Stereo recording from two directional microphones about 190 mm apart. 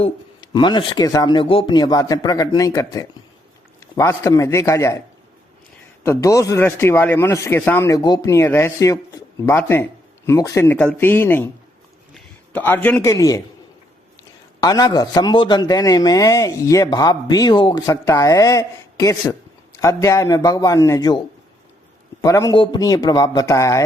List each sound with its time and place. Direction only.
0.0 s a man's voice: 25° left (ahead or behind)
14.6 s a man's voice: 20° left (ahead or behind)
22.2 s a man's voice: 15° left (ahead or behind)